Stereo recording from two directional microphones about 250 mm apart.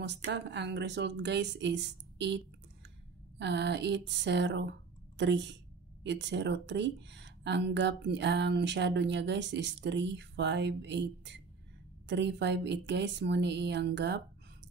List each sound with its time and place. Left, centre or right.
0.0 s speech: right
3.3 s speech: right